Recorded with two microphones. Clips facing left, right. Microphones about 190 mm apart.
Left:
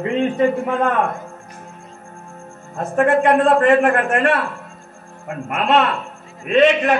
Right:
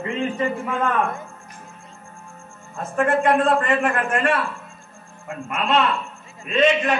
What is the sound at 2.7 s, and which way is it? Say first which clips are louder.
Speech: left 5 dB; 40° left (ahead or behind).